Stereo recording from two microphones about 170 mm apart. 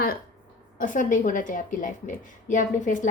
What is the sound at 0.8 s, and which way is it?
A woman's voice, 50° left (ahead or behind).